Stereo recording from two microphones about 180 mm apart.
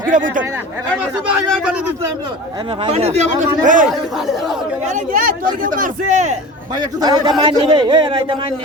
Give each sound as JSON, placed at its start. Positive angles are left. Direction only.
{"t": 0.0, "sound": "speech", "side_deg": -45}
{"t": 2.8, "sound": "speech", "side_deg": -35}
{"t": 4.9, "sound": "a man's voice", "side_deg": -45}
{"t": 6.7, "sound": "a man's voice", "side_deg": -25}